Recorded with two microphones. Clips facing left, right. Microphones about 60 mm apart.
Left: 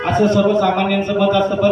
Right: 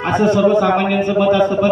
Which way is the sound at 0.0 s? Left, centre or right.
Right.